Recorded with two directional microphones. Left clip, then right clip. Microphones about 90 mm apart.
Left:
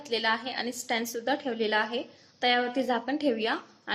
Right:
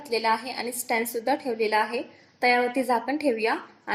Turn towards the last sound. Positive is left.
turn(degrees=-25)  # may be behind; listen again after turning